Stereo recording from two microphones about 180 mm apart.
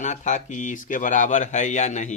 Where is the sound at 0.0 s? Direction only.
40° left (ahead or behind).